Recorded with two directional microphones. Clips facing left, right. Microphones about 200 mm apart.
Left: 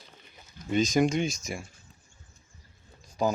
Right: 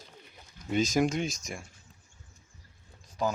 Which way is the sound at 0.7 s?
5° right (ahead or behind).